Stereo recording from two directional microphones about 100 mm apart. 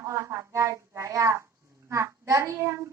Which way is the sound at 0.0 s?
30° right (ahead or behind).